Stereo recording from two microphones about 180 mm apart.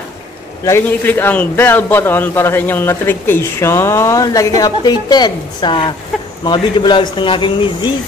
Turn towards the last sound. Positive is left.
turn(degrees=30)  # may be behind; listen again after turning